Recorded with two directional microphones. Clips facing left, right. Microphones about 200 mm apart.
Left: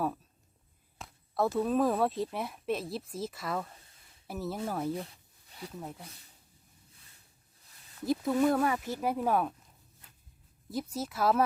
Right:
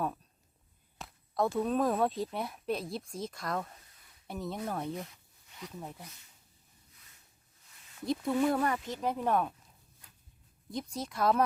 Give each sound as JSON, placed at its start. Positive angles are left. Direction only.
{"t": 0.9, "sound": "speech", "side_deg": 0}
{"t": 4.9, "sound": "a sound", "side_deg": 30}
{"t": 5.7, "sound": "speech", "side_deg": 0}
{"t": 8.0, "sound": "speech", "side_deg": 5}
{"t": 10.7, "sound": "speech", "side_deg": 5}